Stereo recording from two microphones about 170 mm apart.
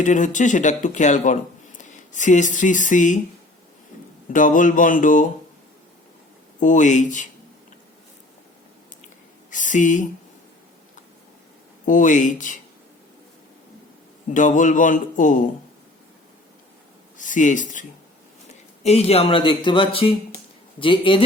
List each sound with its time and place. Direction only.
0.0 s speech: 50° left (ahead or behind)
4.3 s speech: 50° left (ahead or behind)
6.6 s speech: 50° left (ahead or behind)
9.5 s speech: 50° left (ahead or behind)
11.9 s speech: 50° left (ahead or behind)
14.3 s speech: 50° left (ahead or behind)
17.2 s speech: 50° left (ahead or behind)
18.8 s a man's voice: 40° left (ahead or behind)